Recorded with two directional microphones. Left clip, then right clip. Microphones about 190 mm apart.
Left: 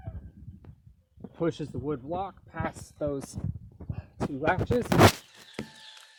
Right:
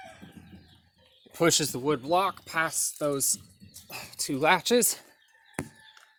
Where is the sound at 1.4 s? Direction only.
15° right (ahead or behind).